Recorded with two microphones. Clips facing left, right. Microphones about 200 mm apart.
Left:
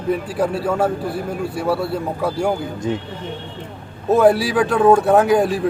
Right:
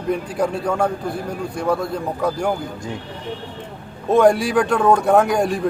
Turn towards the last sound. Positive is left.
turn(degrees=5)  # may be behind; listen again after turning